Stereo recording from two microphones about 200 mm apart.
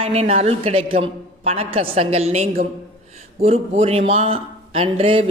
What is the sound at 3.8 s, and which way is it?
A man's voice, 30° right (ahead or behind).